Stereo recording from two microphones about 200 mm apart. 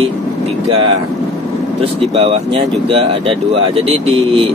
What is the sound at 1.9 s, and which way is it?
Speech, 30° right (ahead or behind).